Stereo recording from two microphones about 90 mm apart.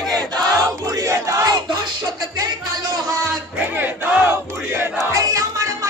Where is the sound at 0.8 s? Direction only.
40° right (ahead or behind).